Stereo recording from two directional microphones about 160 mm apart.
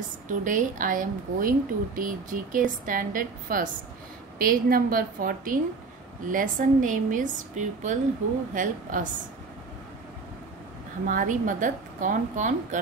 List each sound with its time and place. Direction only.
0.3 s a woman's voice: 55° right (ahead or behind)
11.1 s a woman's voice: 55° right (ahead or behind)